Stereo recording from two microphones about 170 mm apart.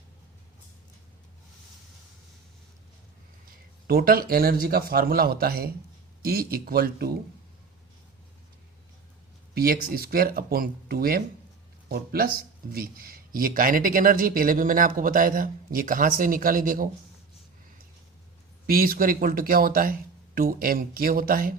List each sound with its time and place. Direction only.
3.8 s speech: 60° right (ahead or behind)
9.6 s speech: 60° right (ahead or behind)
18.6 s speech: 60° right (ahead or behind)